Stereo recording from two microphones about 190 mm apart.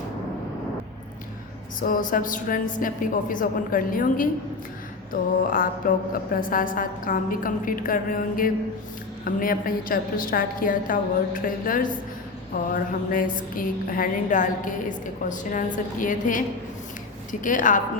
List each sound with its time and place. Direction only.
1.8 s a woman's voice: 45° left (ahead or behind)
17.4 s a woman's voice: 45° left (ahead or behind)